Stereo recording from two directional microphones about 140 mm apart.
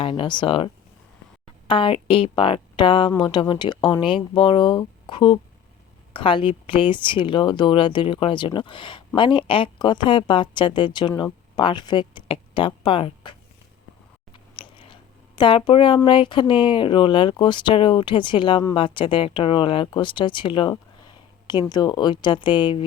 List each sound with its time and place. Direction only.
0.0 s speech: 40° left (ahead or behind)
14.3 s chewing: 40° left (ahead or behind)
15.4 s speech: 35° left (ahead or behind)